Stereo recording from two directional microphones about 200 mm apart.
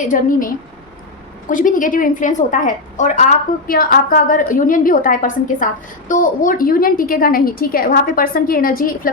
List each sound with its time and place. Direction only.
0.0 s a woman's voice: 40° left (ahead or behind)